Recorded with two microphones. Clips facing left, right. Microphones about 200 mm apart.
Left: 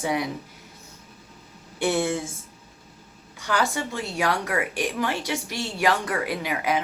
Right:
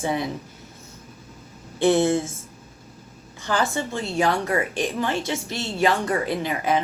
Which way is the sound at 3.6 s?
10° left (ahead or behind).